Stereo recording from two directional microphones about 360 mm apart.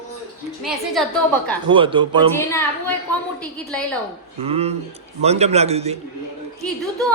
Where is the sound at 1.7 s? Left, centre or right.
Centre.